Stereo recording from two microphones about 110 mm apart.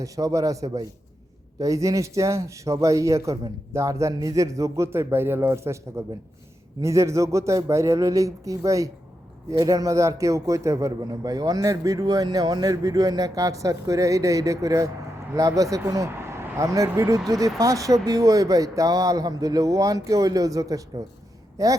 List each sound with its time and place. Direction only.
0.0 s a man's voice: 30° right (ahead or behind)